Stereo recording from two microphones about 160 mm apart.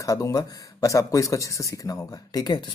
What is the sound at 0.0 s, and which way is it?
Speech, 20° left (ahead or behind).